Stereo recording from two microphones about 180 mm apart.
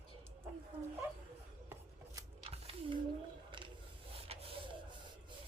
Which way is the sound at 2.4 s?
35° right (ahead or behind).